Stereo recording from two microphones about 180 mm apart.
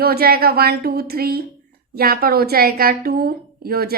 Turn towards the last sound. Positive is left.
turn(degrees=-60)  # may be behind; listen again after turning